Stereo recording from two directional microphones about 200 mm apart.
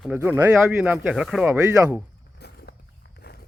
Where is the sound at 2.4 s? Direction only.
55° left (ahead or behind).